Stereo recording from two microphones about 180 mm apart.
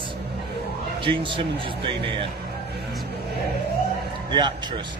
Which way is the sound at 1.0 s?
30° right (ahead or behind).